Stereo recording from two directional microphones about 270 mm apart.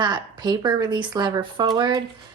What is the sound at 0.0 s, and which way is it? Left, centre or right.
Speech, centre.